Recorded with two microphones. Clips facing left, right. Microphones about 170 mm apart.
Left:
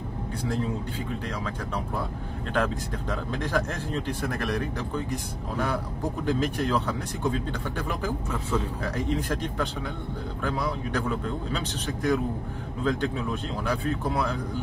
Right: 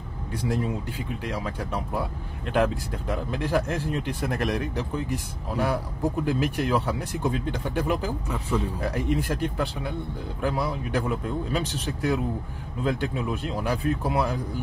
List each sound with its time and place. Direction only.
0.5 s speech: 10° right (ahead or behind)